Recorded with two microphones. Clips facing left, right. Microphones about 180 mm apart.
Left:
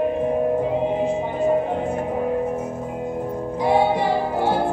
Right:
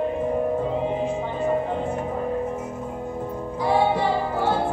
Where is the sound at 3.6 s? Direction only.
15° left (ahead or behind).